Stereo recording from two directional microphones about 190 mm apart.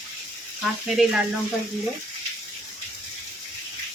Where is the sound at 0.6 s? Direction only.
Centre (ahead or behind).